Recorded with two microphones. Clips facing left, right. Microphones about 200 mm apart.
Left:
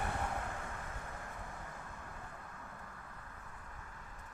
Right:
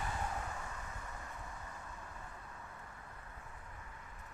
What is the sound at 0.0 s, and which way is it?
Vehicle, 60° left (ahead or behind).